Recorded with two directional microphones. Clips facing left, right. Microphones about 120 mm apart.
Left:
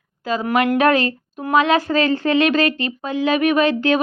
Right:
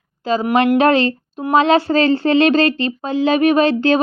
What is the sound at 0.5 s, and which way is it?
A woman's voice, 30° right (ahead or behind).